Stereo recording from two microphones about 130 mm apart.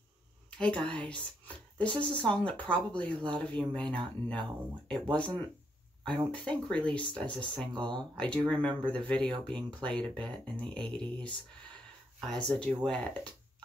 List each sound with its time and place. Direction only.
0.5 s a woman's voice: 10° left (ahead or behind)
7.7 s speech: 35° right (ahead or behind)
8.0 s speech: 10° left (ahead or behind)
12.3 s speech: 5° left (ahead or behind)